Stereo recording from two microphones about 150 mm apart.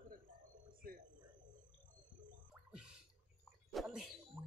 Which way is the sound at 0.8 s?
75° right (ahead or behind).